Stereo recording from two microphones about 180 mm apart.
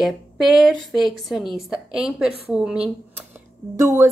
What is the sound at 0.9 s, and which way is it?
A woman's voice, centre (ahead or behind).